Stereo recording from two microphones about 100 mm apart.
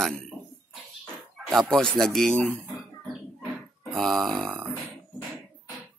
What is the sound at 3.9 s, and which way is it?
Speech, centre (ahead or behind).